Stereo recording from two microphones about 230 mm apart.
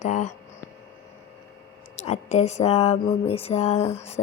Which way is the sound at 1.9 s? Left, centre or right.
Left.